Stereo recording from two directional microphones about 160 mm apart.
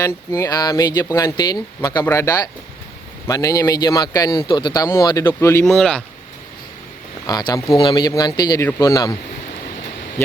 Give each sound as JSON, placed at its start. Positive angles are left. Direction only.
{"t": 0.0, "sound": "a man's voice", "side_deg": 20}
{"t": 5.6, "sound": "speech", "side_deg": 5}
{"t": 7.3, "sound": "a man's voice", "side_deg": 25}